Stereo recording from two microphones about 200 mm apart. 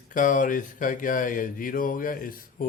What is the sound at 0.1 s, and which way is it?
Speech, 40° left (ahead or behind).